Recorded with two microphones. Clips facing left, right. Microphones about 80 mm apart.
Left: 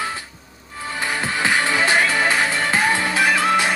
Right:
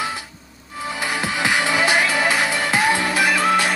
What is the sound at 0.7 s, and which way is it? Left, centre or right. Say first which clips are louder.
Music: even; centre.